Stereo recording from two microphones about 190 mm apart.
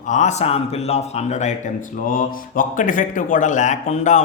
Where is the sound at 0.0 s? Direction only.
40° left (ahead or behind).